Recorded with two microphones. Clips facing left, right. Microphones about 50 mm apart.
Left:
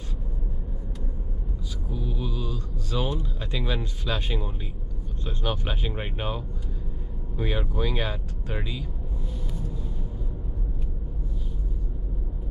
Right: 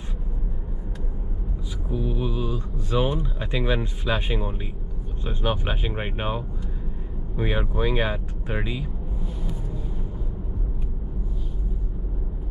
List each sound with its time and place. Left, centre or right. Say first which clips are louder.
1.9 s speech: right 6 dB; centre